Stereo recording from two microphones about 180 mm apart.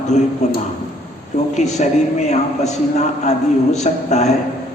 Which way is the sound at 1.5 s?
40° left (ahead or behind).